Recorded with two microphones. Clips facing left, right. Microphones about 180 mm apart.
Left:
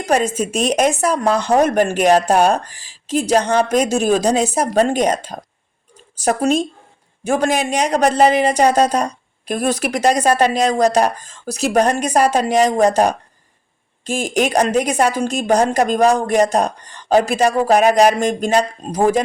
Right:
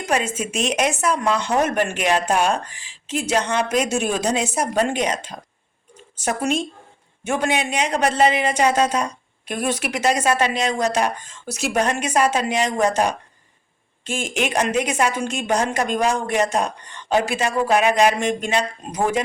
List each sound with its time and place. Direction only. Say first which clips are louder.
0.0 s speech: left 5 dB; 35° left (ahead or behind)